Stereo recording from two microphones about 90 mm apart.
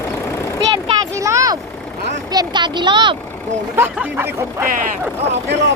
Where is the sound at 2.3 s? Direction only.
50° right (ahead or behind).